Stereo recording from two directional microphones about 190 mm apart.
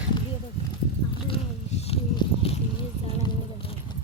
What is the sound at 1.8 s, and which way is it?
Clip-clop, 30° left (ahead or behind).